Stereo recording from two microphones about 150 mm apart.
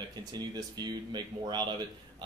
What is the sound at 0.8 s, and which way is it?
Speech, 30° right (ahead or behind).